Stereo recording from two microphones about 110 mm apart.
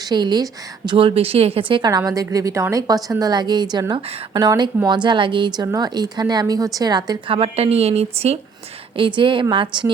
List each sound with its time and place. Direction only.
0.0 s a woman's voice: 40° right (ahead or behind)
0.9 s speech: 55° right (ahead or behind)
1.9 s a woman's voice: 35° right (ahead or behind)
7.3 s a woman's voice: 60° right (ahead or behind)
9.0 s speech: 50° right (ahead or behind)